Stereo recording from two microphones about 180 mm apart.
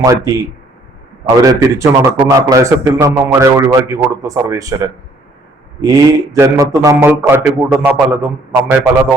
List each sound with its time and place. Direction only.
0.0 s a man's voice: 20° right (ahead or behind)
1.4 s a man's voice: 15° right (ahead or behind)